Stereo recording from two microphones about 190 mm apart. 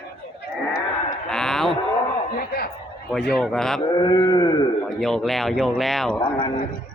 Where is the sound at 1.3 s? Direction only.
5° left (ahead or behind).